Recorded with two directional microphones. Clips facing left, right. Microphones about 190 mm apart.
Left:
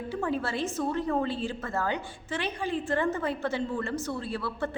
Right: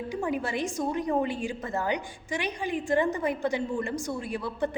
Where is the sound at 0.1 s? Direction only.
15° right (ahead or behind).